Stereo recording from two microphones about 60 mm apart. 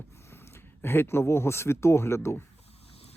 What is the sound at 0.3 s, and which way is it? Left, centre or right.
Speech, left.